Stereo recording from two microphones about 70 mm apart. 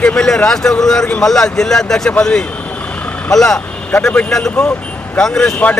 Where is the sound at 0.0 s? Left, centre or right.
Centre.